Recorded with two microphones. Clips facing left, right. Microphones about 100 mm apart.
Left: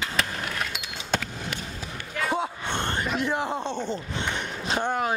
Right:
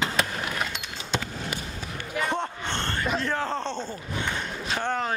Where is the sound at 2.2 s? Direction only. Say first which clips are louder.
Left 2 dB; 5° left (ahead or behind); by 4.9 s 20° left (ahead or behind).